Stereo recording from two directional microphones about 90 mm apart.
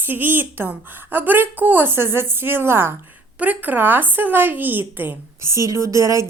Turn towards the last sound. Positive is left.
turn(degrees=-35)  # may be behind; listen again after turning